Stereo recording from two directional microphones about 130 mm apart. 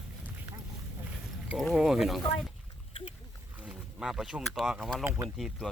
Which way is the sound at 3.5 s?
10° right (ahead or behind).